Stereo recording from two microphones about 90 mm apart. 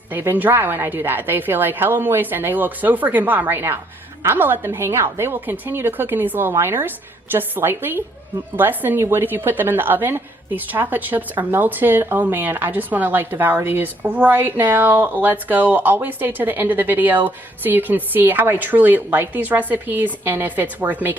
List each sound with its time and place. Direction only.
0.1 s a woman's voice: 25° right (ahead or behind)